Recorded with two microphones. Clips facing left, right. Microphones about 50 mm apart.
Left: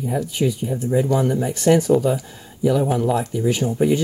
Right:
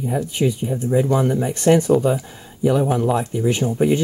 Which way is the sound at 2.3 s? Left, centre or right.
Centre.